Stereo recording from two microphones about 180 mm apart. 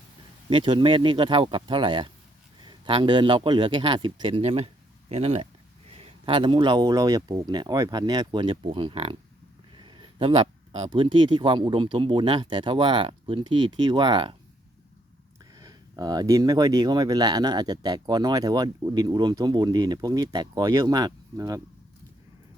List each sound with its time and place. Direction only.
0.5 s a man's voice: 30° right (ahead or behind)
15.5 s speech: 20° right (ahead or behind)